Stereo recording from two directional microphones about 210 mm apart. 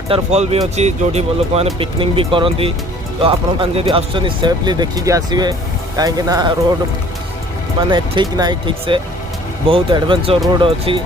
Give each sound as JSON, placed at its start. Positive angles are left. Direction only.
{"t": 0.1, "sound": "speech", "side_deg": -30}
{"t": 7.8, "sound": "speech", "side_deg": -25}